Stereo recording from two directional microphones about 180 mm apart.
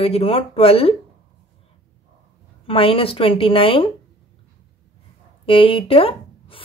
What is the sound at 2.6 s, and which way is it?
A woman's voice, 30° left (ahead or behind).